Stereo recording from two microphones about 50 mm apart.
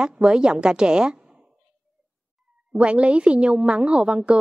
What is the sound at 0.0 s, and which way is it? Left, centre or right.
A woman's voice, centre.